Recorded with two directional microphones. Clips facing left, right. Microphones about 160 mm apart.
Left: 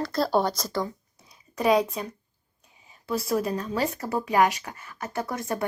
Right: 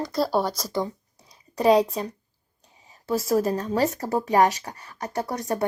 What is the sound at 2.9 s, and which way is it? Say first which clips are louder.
Speech: right 3 dB; 40° right (ahead or behind).